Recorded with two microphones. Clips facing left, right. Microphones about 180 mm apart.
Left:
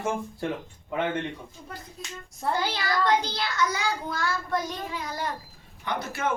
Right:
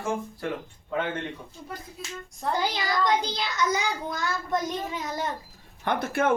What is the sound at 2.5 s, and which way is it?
A child's voice, 15° right (ahead or behind).